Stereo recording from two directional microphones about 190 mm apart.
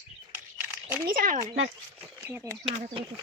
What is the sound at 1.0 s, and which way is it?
Speech, 50° right (ahead or behind).